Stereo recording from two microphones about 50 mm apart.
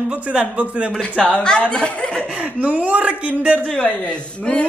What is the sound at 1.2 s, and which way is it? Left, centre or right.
Speech, centre.